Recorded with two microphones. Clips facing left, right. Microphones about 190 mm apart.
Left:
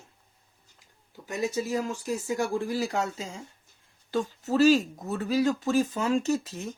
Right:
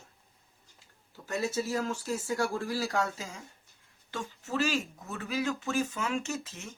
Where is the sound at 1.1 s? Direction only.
15° left (ahead or behind); by 6.7 s 35° left (ahead or behind).